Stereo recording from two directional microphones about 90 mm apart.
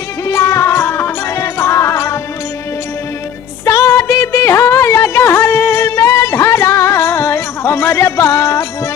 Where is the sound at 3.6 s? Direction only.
35° left (ahead or behind).